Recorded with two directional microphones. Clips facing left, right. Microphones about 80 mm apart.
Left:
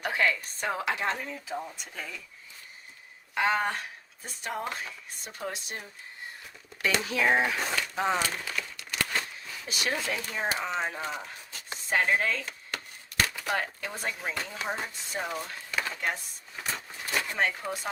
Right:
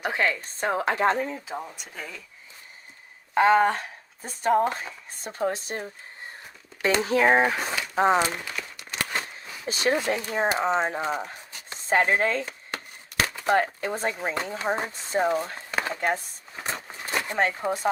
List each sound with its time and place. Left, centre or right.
0.1 s speech: right; by 2.1 s centre
3.3 s speech: right
7.6 s speech: centre
7.9 s speech: right
8.3 s speech: centre
11.2 s chopping: right
11.8 s speech: right
16.6 s a sound: right